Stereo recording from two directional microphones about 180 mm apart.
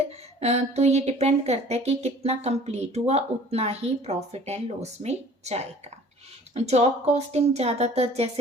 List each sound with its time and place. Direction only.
0.0 s a woman's voice: 35° right (ahead or behind)